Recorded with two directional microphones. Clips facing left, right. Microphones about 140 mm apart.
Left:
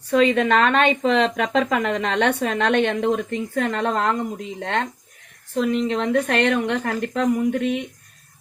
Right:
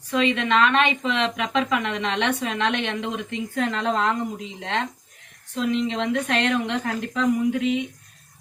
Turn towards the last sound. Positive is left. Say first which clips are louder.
# left 1 dB
turn(degrees=55)  # may be behind; listen again after turning